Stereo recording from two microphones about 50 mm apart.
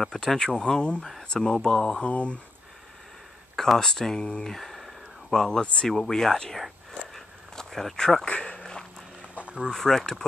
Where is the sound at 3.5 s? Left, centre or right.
Centre.